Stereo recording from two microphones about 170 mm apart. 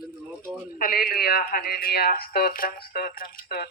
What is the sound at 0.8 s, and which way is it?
Speech, 55° left (ahead or behind).